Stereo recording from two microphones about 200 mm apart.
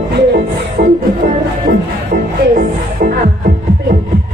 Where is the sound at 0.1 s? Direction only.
55° right (ahead or behind).